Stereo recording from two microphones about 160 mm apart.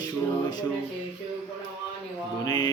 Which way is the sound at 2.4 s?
25° left (ahead or behind).